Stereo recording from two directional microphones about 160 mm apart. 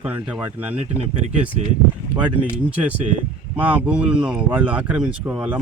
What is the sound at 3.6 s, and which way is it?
Speech, 10° right (ahead or behind).